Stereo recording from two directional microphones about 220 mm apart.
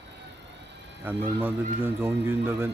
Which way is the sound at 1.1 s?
10° right (ahead or behind).